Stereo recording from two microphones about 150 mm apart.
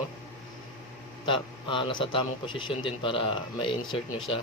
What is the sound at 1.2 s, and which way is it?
A man's voice, 35° left (ahead or behind).